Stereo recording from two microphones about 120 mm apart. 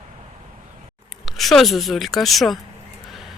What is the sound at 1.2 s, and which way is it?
Speech, centre (ahead or behind).